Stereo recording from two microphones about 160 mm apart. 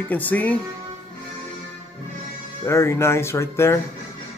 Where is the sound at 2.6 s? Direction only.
15° left (ahead or behind).